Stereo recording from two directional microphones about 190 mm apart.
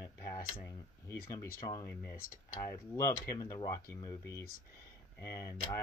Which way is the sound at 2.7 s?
15° left (ahead or behind).